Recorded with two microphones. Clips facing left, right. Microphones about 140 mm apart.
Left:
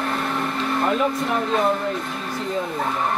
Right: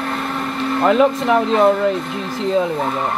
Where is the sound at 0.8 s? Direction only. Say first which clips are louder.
Right 10 dB; 90° right.